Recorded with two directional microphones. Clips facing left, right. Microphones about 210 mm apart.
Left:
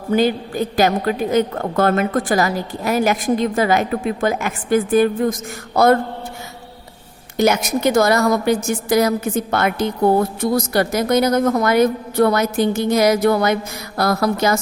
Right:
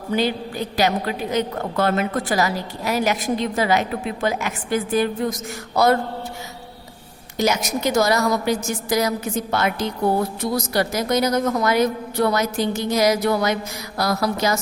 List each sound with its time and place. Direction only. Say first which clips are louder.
0.1 s a woman's voice: left 5 dB; 50° left (ahead or behind)
7.3 s a woman's voice: left 5 dB; 55° left (ahead or behind)